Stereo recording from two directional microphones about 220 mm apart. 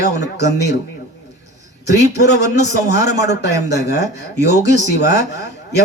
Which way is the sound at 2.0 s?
50° left (ahead or behind).